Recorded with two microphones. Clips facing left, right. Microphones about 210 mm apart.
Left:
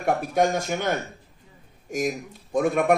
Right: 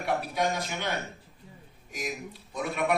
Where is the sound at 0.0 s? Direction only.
45° left (ahead or behind).